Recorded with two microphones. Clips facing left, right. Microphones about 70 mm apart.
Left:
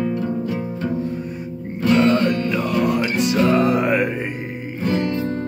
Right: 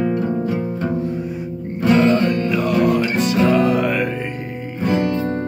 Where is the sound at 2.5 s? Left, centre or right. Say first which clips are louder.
Right 3 dB; centre.